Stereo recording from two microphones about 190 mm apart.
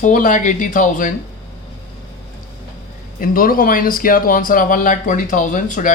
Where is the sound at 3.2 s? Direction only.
50° left (ahead or behind).